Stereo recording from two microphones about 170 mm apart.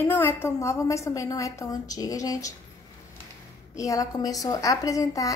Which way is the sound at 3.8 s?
20° left (ahead or behind).